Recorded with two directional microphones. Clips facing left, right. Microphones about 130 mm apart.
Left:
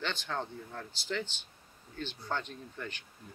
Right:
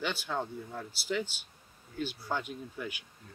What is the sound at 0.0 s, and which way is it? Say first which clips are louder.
Speech: right 2 dB; 10° right (ahead or behind).